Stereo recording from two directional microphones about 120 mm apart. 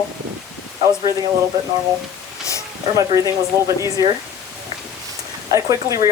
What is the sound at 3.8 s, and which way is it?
Speech, 30° right (ahead or behind).